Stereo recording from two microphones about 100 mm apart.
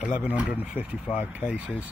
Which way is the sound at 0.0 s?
15° right (ahead or behind).